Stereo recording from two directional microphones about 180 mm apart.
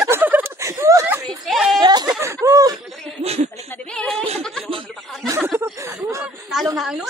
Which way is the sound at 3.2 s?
35° right (ahead or behind).